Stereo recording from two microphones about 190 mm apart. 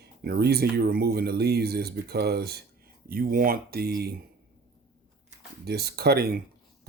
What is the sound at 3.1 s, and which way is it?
Speech, 50° right (ahead or behind).